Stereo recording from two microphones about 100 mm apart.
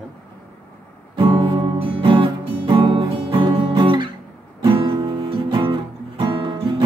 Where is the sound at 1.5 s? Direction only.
60° right (ahead or behind).